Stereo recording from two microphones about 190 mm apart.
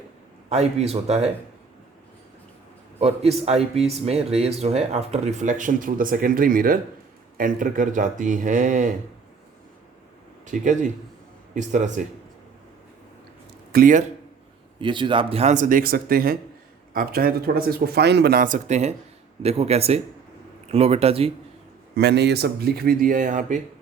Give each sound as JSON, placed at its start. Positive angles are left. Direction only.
{"t": 0.5, "sound": "speech", "side_deg": -35}
{"t": 3.0, "sound": "speech", "side_deg": -35}
{"t": 10.4, "sound": "speech", "side_deg": -40}
{"t": 13.7, "sound": "speech", "side_deg": -45}
{"t": 14.8, "sound": "speech", "side_deg": -25}
{"t": 21.9, "sound": "a man's voice", "side_deg": -65}